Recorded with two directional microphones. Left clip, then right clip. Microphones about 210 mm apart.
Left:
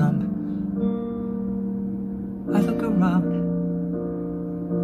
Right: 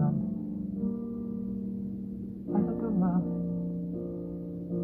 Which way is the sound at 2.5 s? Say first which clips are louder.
Left 8 dB; 10° left (ahead or behind).